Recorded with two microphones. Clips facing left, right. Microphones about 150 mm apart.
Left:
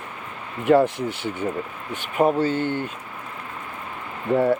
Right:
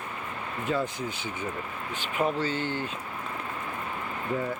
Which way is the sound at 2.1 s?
45° left (ahead or behind).